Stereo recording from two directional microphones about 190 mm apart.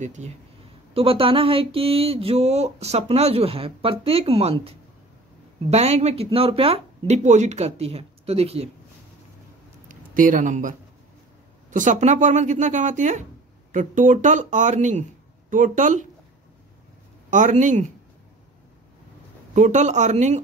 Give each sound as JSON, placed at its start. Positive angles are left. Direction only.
{"t": 0.0, "sound": "speech", "side_deg": -40}
{"t": 9.8, "sound": "speech", "side_deg": -45}
{"t": 17.3, "sound": "speech", "side_deg": -40}
{"t": 19.5, "sound": "speech", "side_deg": -40}